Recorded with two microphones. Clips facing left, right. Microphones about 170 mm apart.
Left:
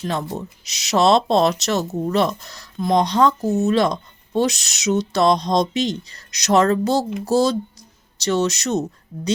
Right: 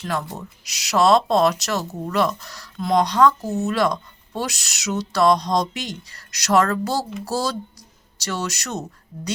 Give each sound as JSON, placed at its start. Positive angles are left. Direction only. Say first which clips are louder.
{"t": 0.0, "sound": "speech", "louder": "left 2 dB", "side_deg": 25}